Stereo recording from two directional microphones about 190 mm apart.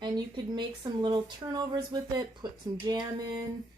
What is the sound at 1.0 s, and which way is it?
Speech, 25° right (ahead or behind).